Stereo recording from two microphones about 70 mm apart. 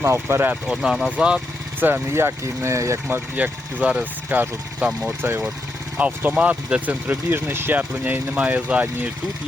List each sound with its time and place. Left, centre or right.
0.0 s speech: right
0.7 s speech: centre
1.1 s speech: centre
1.8 s speech: right
3.3 s speech: right
6.0 s speech: centre